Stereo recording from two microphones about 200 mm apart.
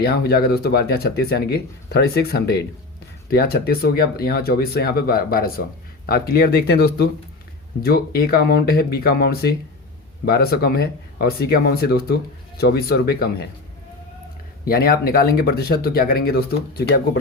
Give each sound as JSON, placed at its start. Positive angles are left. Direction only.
{"t": 0.0, "sound": "speech", "side_deg": 50}
{"t": 14.6, "sound": "speech", "side_deg": 50}